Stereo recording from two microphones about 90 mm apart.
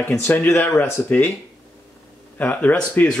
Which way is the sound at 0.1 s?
20° left (ahead or behind).